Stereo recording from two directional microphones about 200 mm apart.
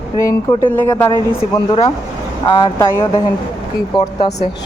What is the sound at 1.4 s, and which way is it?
Speech, 30° left (ahead or behind).